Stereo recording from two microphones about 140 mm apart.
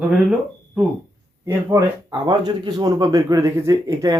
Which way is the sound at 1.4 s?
25° right (ahead or behind).